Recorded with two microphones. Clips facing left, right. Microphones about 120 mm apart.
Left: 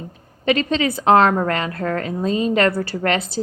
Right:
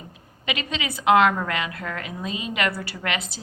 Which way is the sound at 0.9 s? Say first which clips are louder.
Left 3 dB; 35° left (ahead or behind).